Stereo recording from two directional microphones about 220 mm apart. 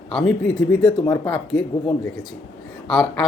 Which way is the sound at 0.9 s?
20° left (ahead or behind).